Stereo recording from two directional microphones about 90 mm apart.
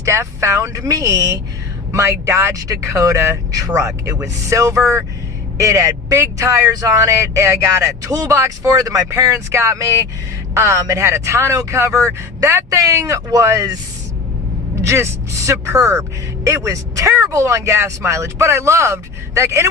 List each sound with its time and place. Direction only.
0.0 s speech: 30° right (ahead or behind)
14.8 s speech: 30° right (ahead or behind)